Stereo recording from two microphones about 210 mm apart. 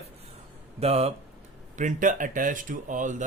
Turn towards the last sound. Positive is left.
turn(degrees=-35)  # may be behind; listen again after turning